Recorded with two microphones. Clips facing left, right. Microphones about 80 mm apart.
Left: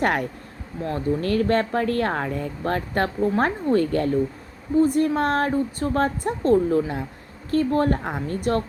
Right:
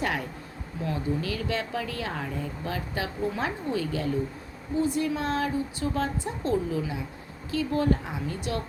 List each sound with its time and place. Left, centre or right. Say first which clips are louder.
0.0 s speech: left 7 dB; left